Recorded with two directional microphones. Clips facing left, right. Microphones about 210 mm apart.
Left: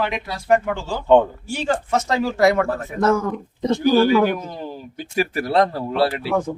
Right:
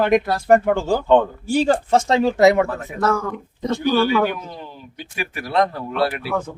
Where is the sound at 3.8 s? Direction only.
40° left (ahead or behind).